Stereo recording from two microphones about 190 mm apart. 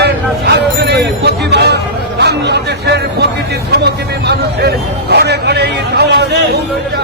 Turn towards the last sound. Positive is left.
turn(degrees=-60)  # may be behind; listen again after turning